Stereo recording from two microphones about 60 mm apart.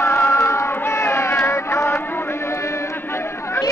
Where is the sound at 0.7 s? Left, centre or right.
Left.